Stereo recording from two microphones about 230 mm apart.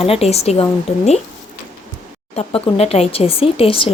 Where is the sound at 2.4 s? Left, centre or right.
Left.